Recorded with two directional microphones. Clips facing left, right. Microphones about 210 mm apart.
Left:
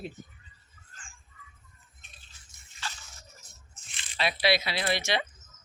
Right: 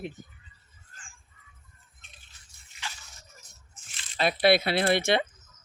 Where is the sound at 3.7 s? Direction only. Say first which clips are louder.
Right 2 dB; 50° right (ahead or behind).